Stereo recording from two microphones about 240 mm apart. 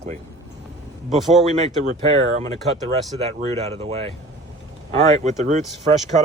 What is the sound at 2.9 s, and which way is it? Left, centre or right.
Speech, right.